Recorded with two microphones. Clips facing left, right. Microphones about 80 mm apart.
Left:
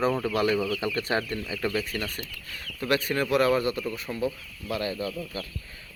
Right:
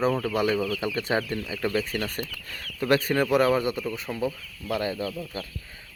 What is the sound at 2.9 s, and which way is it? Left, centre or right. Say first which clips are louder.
Speech: right 3 dB; right.